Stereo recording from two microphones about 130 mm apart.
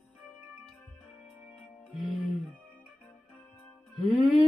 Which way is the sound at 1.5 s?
Centre (ahead or behind).